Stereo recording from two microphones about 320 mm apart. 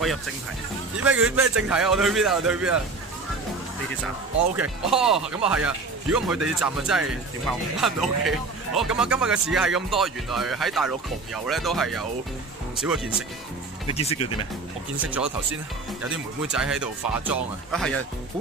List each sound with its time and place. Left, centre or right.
1.0 s speech: centre
4.6 s speech: centre
13.8 s speech: centre
15.0 s speech: centre